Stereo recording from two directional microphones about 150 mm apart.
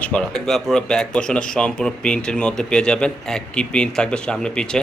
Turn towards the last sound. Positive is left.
turn(degrees=5)  # may be behind; listen again after turning